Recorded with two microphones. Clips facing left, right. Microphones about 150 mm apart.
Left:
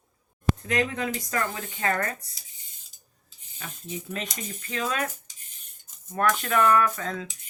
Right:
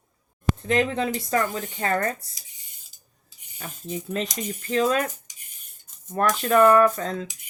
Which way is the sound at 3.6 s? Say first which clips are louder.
Right 4 dB; 35° right (ahead or behind).